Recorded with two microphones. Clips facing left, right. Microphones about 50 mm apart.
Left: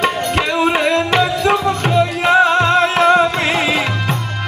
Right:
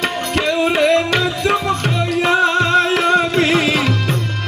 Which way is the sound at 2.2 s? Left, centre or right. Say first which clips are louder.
Left 2 dB; centre.